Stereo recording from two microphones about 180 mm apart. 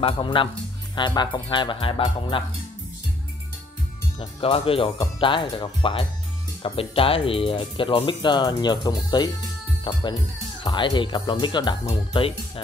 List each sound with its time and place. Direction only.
0.0 s speech: 30° left (ahead or behind)
4.2 s speech: 30° left (ahead or behind)